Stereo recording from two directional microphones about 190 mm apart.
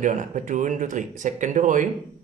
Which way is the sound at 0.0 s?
40° right (ahead or behind).